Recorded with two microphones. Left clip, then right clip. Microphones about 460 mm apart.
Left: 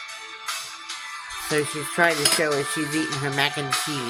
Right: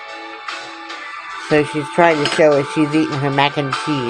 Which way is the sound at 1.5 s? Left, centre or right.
Left.